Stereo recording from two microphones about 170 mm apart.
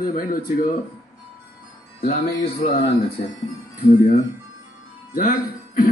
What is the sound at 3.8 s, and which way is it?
Speech, 45° left (ahead or behind).